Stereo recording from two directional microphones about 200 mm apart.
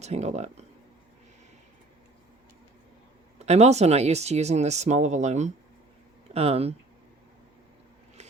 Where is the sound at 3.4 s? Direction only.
35° right (ahead or behind).